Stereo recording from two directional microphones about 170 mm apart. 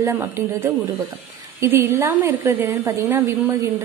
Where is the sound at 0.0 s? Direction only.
15° right (ahead or behind).